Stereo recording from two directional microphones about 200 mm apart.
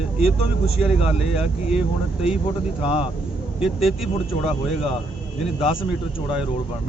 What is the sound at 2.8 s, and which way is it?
Speech, 30° left (ahead or behind).